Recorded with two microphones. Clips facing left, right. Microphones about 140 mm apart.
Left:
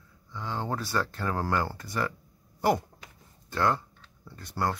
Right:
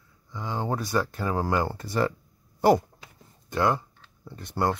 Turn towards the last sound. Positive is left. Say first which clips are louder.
# right 4 dB
turn(degrees=-20)  # may be behind; listen again after turning